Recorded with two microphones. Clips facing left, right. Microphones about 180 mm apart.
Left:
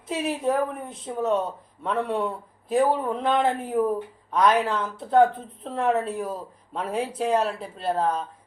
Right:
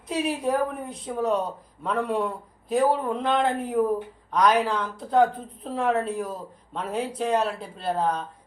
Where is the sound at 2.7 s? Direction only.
5° left (ahead or behind).